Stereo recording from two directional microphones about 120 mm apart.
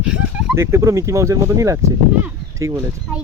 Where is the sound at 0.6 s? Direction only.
20° right (ahead or behind).